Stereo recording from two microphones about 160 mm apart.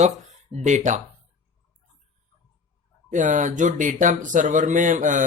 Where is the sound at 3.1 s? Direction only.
50° right (ahead or behind).